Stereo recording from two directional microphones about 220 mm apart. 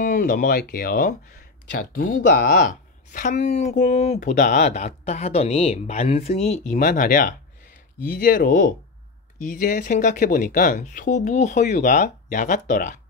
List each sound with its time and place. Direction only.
0.0 s a woman's voice: 35° left (ahead or behind)